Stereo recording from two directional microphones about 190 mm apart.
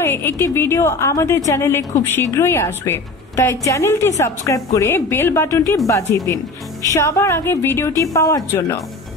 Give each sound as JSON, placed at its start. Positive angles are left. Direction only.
{"t": 0.0, "sound": "a woman's voice", "side_deg": 10}